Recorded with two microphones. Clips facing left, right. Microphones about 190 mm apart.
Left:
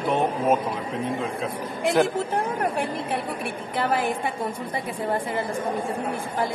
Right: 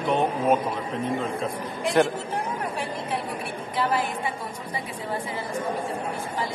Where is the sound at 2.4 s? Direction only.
55° left (ahead or behind).